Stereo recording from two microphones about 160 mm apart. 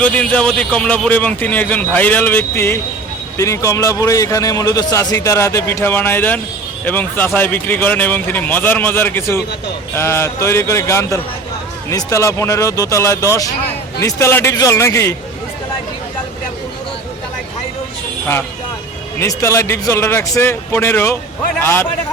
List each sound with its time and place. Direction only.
0.0 s a man's voice: 10° left (ahead or behind)
19.2 s a man's voice: 15° left (ahead or behind)